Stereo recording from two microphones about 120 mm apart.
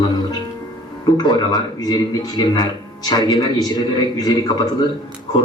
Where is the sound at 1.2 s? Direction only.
35° left (ahead or behind).